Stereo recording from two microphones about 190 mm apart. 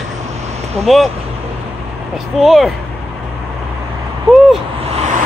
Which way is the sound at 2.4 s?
Centre (ahead or behind).